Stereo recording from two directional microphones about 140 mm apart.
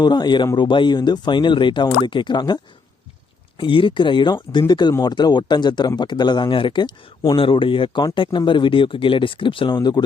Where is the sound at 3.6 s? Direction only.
35° left (ahead or behind).